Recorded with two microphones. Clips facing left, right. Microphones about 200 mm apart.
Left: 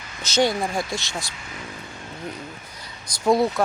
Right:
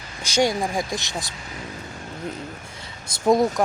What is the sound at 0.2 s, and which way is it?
Speech, 10° right (ahead or behind).